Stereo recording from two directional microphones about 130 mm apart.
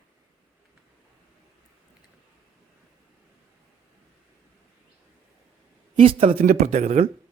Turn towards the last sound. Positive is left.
turn(degrees=-60)  # may be behind; listen again after turning